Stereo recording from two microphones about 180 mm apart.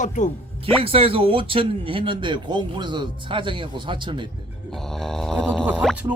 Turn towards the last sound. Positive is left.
turn(degrees=0)  # may be behind; listen again after turning